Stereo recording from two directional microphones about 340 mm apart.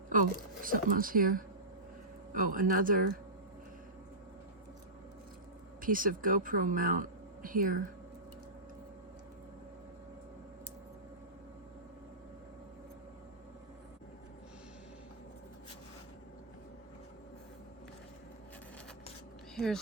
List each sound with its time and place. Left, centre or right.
0.1 s a woman's voice: right
5.8 s speech: right
19.5 s speech: centre